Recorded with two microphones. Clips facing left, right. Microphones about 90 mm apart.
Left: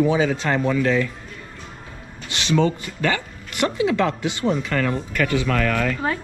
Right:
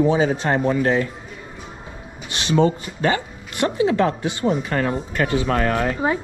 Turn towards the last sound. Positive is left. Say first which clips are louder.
# right 1 dB
turn(degrees=-30)  # may be behind; listen again after turning